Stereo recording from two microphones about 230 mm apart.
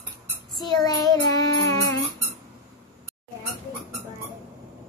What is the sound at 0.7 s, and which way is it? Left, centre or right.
Child singing, centre.